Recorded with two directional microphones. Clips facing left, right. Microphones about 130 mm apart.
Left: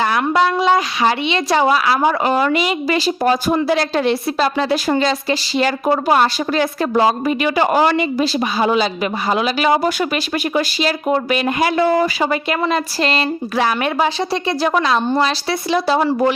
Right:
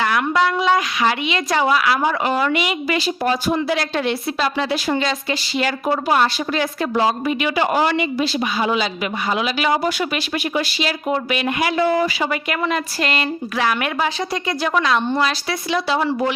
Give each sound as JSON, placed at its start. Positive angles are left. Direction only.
{"t": 0.0, "sound": "a woman's voice", "side_deg": 30}